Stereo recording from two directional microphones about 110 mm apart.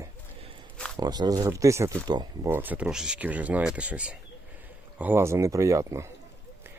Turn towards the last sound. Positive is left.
turn(degrees=-25)  # may be behind; listen again after turning